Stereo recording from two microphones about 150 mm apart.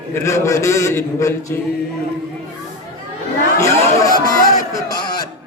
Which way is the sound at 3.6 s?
20° left (ahead or behind).